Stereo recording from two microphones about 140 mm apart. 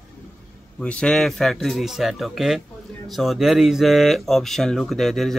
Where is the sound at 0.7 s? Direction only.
5° left (ahead or behind).